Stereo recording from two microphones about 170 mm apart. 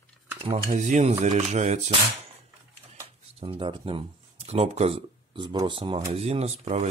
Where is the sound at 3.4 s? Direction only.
30° right (ahead or behind).